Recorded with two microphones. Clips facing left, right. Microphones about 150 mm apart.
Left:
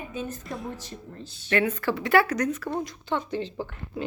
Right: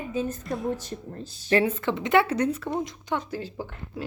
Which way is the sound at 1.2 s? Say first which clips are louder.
Right 2 dB; 30° right (ahead or behind).